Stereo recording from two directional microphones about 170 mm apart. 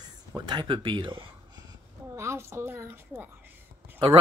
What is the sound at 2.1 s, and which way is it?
A woman's voice, 15° right (ahead or behind).